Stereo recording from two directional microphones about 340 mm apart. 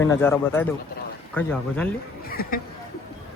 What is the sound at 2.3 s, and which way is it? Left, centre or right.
Speech, left.